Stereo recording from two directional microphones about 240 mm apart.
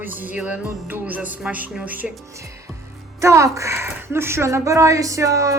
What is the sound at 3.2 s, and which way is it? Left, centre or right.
Speech, centre.